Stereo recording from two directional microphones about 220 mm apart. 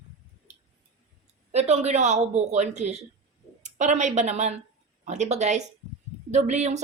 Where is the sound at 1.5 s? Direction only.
30° right (ahead or behind).